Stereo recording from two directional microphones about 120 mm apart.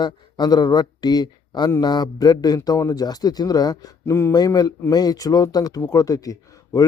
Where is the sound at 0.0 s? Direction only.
35° left (ahead or behind).